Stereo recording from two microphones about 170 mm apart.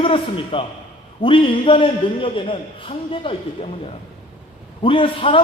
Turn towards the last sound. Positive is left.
turn(degrees=30)  # may be behind; listen again after turning